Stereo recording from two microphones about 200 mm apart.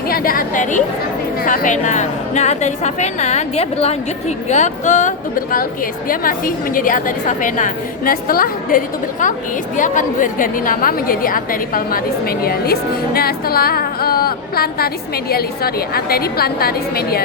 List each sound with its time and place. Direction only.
0.1 s a woman's voice: 45° left (ahead or behind)